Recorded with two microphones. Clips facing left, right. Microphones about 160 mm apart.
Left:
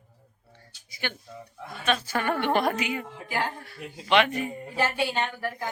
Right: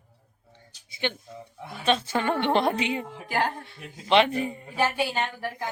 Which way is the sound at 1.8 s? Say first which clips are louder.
Right 2 dB; 25° right (ahead or behind).